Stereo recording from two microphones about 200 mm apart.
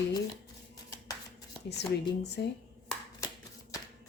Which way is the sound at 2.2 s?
55° left (ahead or behind).